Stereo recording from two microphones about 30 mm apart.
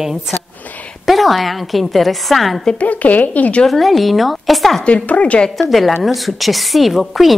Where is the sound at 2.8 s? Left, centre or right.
Left.